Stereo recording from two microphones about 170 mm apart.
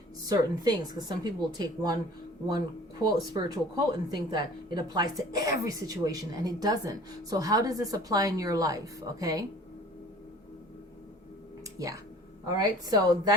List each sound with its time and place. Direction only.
0.3 s speech: 25° right (ahead or behind)
12.5 s speech: 20° right (ahead or behind)